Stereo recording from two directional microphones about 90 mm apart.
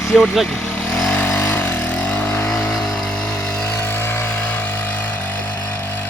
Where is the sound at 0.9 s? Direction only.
15° left (ahead or behind).